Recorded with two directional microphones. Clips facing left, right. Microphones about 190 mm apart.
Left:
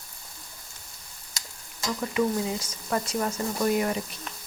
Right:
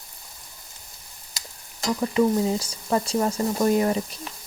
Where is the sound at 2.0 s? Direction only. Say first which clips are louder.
Right 5 dB; 35° right (ahead or behind).